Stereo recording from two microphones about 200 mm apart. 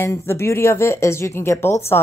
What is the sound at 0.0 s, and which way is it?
A woman's voice, 15° left (ahead or behind).